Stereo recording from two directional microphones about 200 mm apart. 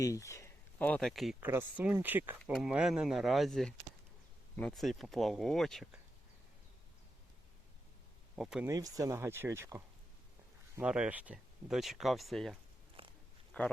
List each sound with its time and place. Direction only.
0.0 s speech: 15° left (ahead or behind); by 2.4 s 10° right (ahead or behind)
2.4 s speech: centre (ahead or behind)
8.4 s speech: 5° right (ahead or behind)
8.6 s speech: 15° right (ahead or behind); by 12.5 s centre (ahead or behind)
13.0 s biting: 25° right (ahead or behind)
13.5 s speech: 5° left (ahead or behind)